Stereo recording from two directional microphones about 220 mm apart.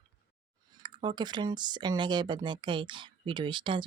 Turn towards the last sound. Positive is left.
turn(degrees=-20)  # may be behind; listen again after turning